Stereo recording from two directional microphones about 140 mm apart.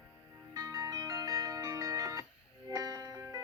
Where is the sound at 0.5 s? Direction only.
25° right (ahead or behind).